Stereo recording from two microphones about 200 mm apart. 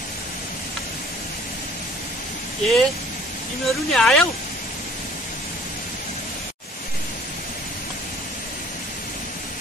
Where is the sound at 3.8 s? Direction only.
Centre (ahead or behind).